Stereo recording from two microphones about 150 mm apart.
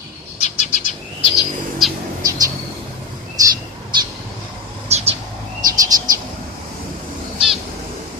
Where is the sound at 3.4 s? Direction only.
25° right (ahead or behind).